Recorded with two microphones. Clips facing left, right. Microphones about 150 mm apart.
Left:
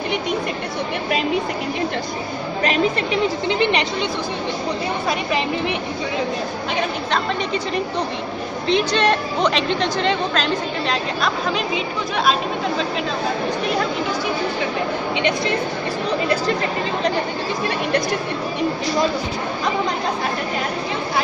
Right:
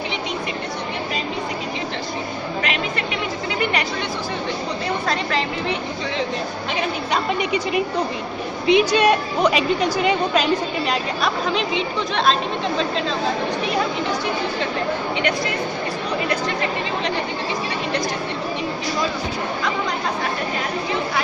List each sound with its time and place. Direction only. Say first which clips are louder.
3.4 s a woman's voice: left 1 dB; 25° left (ahead or behind)
5.0 s a woman's voice: left 1 dB; 10° left (ahead or behind)
8.6 s a woman's voice: right 3 dB; 10° right (ahead or behind)